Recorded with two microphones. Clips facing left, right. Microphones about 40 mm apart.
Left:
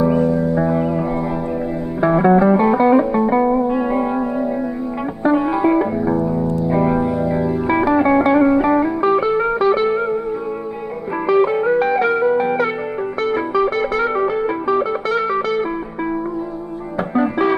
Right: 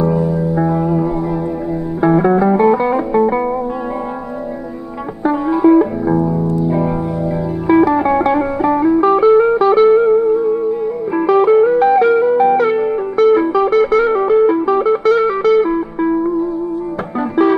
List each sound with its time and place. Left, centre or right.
0.2 s music: centre
0.7 s music: centre
5.2 s music: centre
7.8 s music: centre
11.2 s music: centre
17.1 s music: centre